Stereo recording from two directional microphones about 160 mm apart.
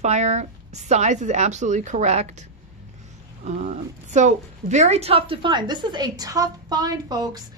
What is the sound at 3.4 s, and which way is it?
A woman's voice, 45° right (ahead or behind).